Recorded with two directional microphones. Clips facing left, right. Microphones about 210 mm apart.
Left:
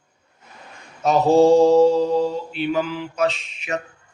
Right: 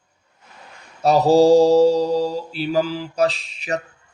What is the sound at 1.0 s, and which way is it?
A man's voice, 35° right (ahead or behind).